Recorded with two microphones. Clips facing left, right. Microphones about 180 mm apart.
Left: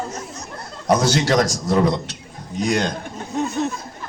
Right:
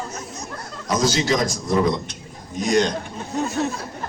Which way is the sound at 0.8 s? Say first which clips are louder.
Left 3 dB; 65° left (ahead or behind).